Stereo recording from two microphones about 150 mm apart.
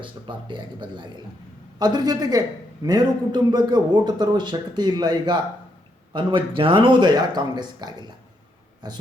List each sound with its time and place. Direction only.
0.0 s a man's voice: 35° right (ahead or behind)